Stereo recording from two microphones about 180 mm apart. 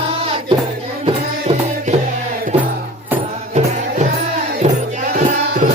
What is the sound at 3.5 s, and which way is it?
Music, 40° right (ahead or behind).